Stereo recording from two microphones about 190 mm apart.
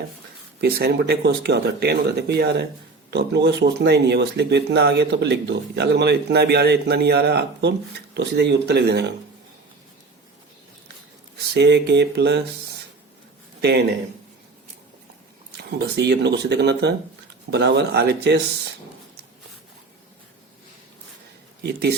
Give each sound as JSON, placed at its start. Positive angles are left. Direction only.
{"t": 0.6, "sound": "speech", "side_deg": -60}
{"t": 11.3, "sound": "speech", "side_deg": -65}
{"t": 13.6, "sound": "speech", "side_deg": -60}
{"t": 15.8, "sound": "speech", "side_deg": -60}
{"t": 21.6, "sound": "speech", "side_deg": -60}